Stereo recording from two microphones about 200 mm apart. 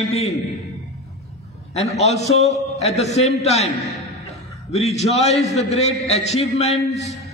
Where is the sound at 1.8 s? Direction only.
35° left (ahead or behind).